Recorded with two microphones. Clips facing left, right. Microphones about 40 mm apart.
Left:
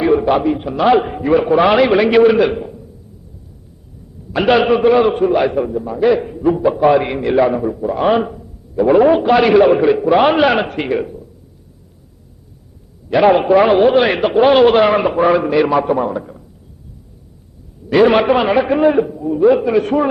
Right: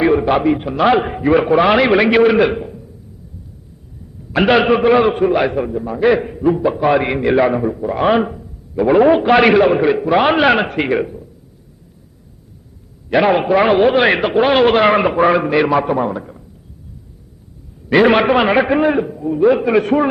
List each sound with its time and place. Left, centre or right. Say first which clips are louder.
0.2 s a man's voice: even; centre
2.6 s a sound: even; centre
4.3 s a man's voice: even; centre
6.4 s a man's voice: left 4 dB; centre
6.9 s a man's voice: even; centre
9.3 s a man's voice: right 1 dB; right
9.6 s a man's voice: left 2 dB; centre
13.2 s a man's voice: left 4 dB; centre
17.8 s a man's voice: left 1 dB; right
18.1 s a man's voice: even; centre
18.3 s a man's voice: right 1 dB; right
18.8 s a man's voice: left 2 dB; centre